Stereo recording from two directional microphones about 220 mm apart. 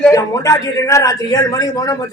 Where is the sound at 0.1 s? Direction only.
15° left (ahead or behind).